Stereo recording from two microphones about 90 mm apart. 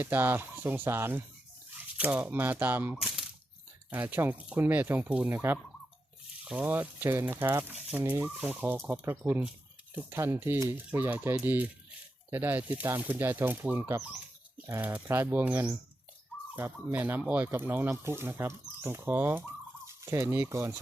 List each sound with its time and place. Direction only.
0.0 s speech: 20° right (ahead or behind)
2.9 s a sound: 5° right (ahead or behind)
3.8 s speech: 20° right (ahead or behind)
5.3 s speech: 25° right (ahead or behind)
6.4 s speech: 15° right (ahead or behind); by 20.7 s 35° right (ahead or behind)